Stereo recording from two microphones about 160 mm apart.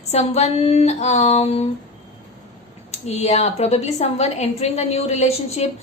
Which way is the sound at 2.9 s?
45° left (ahead or behind).